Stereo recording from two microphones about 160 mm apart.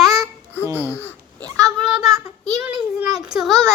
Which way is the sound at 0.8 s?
15° left (ahead or behind).